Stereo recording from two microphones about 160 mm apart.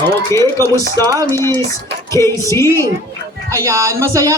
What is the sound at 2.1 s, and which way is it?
Female singing, 20° left (ahead or behind).